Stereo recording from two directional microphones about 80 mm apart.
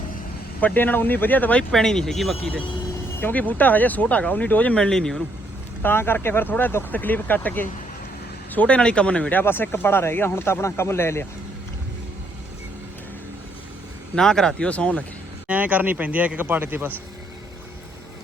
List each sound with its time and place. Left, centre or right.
0.6 s speech: left
1.7 s speech: centre
3.2 s speech: left
4.8 s speech: centre
5.8 s speech: left
9.4 s speech: left
14.2 s speech: centre
15.4 s a man's voice: centre